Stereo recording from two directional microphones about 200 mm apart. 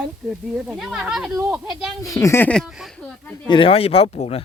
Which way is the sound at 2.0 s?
15° left (ahead or behind).